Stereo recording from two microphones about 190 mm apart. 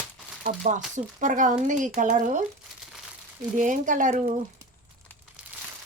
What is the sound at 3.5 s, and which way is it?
Speech, 40° right (ahead or behind).